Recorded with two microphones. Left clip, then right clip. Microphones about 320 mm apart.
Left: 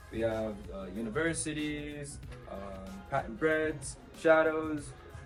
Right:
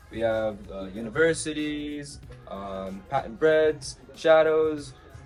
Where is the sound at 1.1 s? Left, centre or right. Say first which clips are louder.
Right 10 dB; right.